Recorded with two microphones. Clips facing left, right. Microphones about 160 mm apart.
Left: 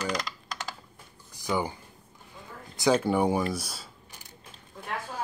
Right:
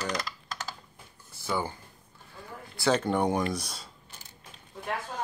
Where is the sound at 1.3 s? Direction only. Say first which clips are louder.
Left 2 dB; 15° left (ahead or behind).